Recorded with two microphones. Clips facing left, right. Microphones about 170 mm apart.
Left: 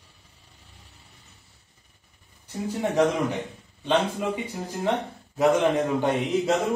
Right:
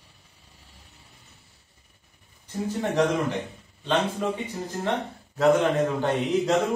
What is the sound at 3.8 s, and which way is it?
Speech, 10° left (ahead or behind).